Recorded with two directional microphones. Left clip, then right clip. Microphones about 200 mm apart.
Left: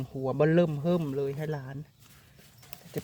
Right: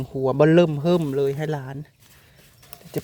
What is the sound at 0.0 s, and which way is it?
Speech, 35° right (ahead or behind).